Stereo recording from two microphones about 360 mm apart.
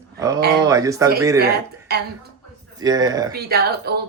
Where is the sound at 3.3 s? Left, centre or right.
Right.